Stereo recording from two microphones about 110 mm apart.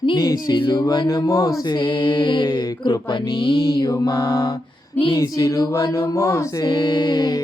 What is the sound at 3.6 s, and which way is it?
Music, 35° left (ahead or behind).